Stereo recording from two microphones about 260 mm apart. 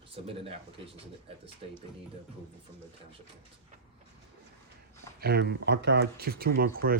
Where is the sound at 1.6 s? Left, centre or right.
Right.